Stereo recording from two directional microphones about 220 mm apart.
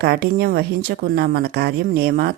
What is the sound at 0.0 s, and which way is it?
Speech, 45° right (ahead or behind).